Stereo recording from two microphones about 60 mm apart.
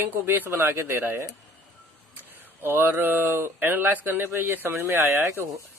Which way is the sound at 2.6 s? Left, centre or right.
Right.